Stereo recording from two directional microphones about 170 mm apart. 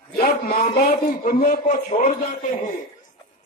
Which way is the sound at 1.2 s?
55° left (ahead or behind).